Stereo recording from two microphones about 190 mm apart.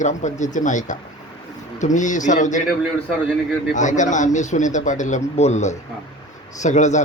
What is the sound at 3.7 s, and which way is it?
Speech, 40° left (ahead or behind).